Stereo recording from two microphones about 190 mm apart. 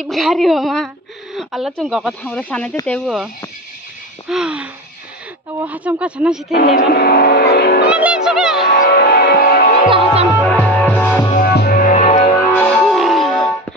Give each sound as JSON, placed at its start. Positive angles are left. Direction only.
{"t": 0.0, "sound": "speech", "side_deg": 0}
{"t": 1.3, "sound": "a sound", "side_deg": 0}
{"t": 1.8, "sound": "speech", "side_deg": 0}
{"t": 4.3, "sound": "speech", "side_deg": -5}
{"t": 6.5, "sound": "speech", "side_deg": 55}
{"t": 7.5, "sound": "music", "side_deg": 60}
{"t": 7.9, "sound": "speech", "side_deg": -5}
{"t": 8.7, "sound": "music", "side_deg": 50}
{"t": 10.4, "sound": "music", "side_deg": 5}
{"t": 11.3, "sound": "music", "side_deg": 55}
{"t": 12.2, "sound": "music", "side_deg": 20}
{"t": 12.5, "sound": "music", "side_deg": 0}